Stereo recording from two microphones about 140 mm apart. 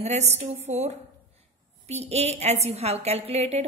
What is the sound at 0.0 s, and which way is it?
A woman's voice, 50° right (ahead or behind).